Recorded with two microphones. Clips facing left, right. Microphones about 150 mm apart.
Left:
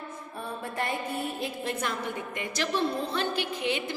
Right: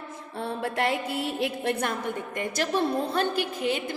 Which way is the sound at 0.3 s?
75° right (ahead or behind).